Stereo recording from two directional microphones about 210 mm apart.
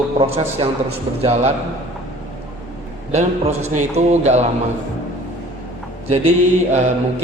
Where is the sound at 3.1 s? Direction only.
30° right (ahead or behind).